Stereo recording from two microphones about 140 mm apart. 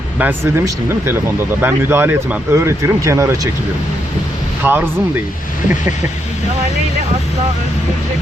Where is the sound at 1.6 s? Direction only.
15° right (ahead or behind).